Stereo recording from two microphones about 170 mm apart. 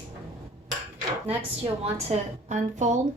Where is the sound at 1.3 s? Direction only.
35° right (ahead or behind).